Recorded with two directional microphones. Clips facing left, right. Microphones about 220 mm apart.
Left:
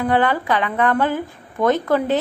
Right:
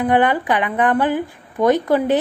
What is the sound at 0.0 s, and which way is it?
A woman's voice, 15° right (ahead or behind).